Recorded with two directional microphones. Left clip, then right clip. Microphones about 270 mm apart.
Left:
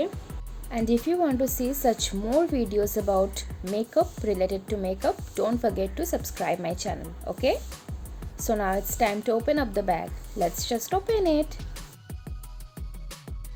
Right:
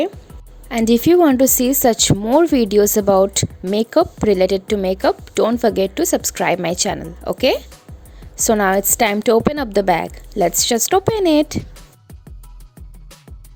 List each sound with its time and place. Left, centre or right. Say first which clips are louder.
0.7 s a woman's voice: right 12 dB; right
11.6 s music: right 2 dB; centre